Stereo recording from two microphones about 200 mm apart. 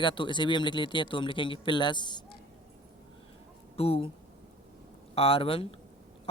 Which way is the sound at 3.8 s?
30° left (ahead or behind).